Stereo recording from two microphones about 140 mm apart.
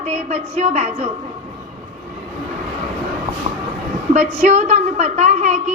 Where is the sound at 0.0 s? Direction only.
50° right (ahead or behind).